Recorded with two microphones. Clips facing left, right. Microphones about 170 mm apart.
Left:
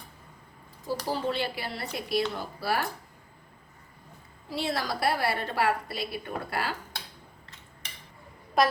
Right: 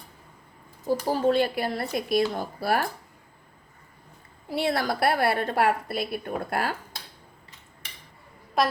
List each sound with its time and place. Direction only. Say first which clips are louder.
0.9 s speech: right 7 dB; 50° right (ahead or behind)
4.4 s a woman's voice: right 5 dB; 60° right (ahead or behind)
8.6 s a woman's voice: even; centre (ahead or behind)